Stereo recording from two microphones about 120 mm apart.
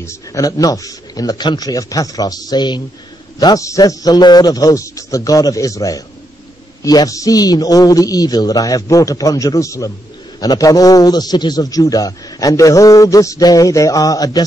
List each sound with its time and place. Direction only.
0.0 s a man's voice: 25° left (ahead or behind)